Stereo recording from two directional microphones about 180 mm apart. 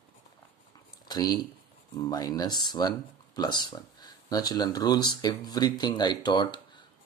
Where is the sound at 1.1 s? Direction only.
20° left (ahead or behind).